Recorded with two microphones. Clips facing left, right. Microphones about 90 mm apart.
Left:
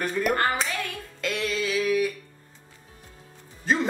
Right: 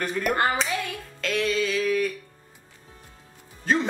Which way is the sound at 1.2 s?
Centre (ahead or behind).